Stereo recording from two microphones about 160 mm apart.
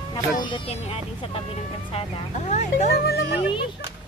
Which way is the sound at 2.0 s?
45° left (ahead or behind).